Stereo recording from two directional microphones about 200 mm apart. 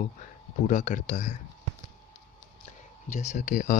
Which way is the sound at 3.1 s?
35° left (ahead or behind).